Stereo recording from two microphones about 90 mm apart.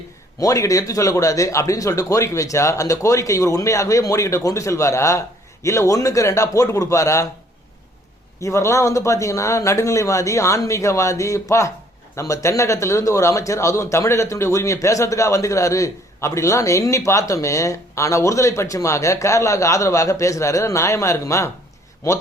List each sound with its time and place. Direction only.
0.3 s a man's voice: 40° left (ahead or behind)
8.4 s a man's voice: 35° left (ahead or behind)